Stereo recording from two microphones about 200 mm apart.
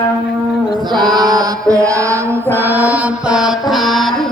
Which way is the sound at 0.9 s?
20° right (ahead or behind).